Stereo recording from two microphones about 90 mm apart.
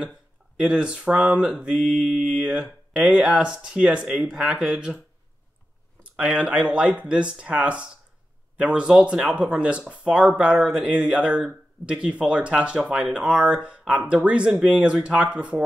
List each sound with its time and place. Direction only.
0.6 s speech: 10° right (ahead or behind)
6.1 s speech: 10° right (ahead or behind)